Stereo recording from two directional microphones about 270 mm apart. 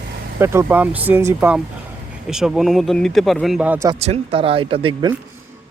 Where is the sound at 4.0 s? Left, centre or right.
Right.